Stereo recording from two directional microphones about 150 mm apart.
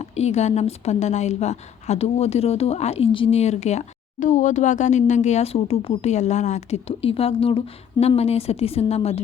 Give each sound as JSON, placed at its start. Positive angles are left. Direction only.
{"t": 0.0, "sound": "a woman's voice", "side_deg": 45}